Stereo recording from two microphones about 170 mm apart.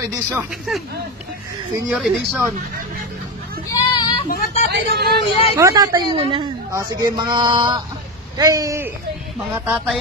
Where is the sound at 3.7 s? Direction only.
25° left (ahead or behind).